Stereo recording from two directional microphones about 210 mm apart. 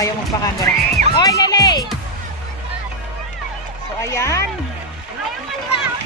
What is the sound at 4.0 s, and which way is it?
Speech, 15° left (ahead or behind).